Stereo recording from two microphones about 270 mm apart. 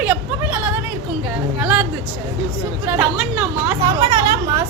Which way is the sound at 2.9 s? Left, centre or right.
Centre.